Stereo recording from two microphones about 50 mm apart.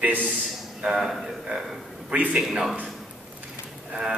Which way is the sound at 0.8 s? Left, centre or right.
Centre.